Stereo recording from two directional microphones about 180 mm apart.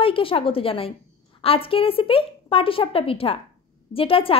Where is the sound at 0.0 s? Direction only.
30° left (ahead or behind).